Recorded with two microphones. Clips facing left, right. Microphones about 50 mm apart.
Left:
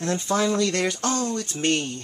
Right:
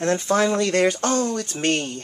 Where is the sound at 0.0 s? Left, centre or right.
Right.